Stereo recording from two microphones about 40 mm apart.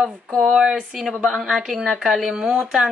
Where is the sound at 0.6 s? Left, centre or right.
Centre.